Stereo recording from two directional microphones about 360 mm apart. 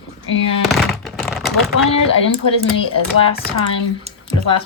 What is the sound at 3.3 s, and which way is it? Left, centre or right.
Speech, left.